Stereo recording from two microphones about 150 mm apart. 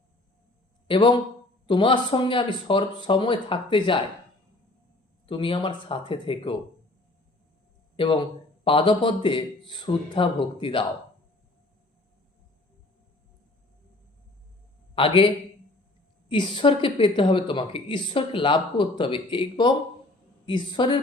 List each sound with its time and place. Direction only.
0.9 s a woman's voice: 35° left (ahead or behind)
5.2 s a woman's voice: 35° left (ahead or behind)
7.9 s a woman's voice: 35° left (ahead or behind)
14.9 s a woman's voice: 35° left (ahead or behind)
16.3 s a woman's voice: 30° left (ahead or behind)